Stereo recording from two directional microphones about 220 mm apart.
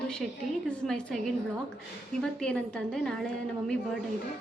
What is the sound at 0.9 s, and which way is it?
A woman's voice, centre (ahead or behind).